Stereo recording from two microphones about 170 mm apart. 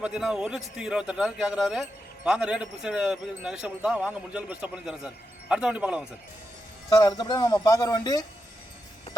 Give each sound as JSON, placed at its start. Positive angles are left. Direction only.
{"t": 0.0, "sound": "a man's voice", "side_deg": -5}
{"t": 6.9, "sound": "speech", "side_deg": 25}